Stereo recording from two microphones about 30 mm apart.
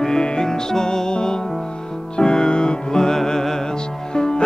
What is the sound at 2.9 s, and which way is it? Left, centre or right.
Music, centre.